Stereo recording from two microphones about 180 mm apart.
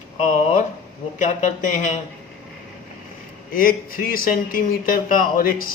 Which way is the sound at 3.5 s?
50° left (ahead or behind).